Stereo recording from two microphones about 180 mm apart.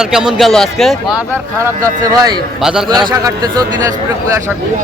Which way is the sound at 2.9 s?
25° right (ahead or behind).